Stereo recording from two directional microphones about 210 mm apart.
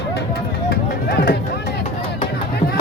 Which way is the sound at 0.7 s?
50° left (ahead or behind).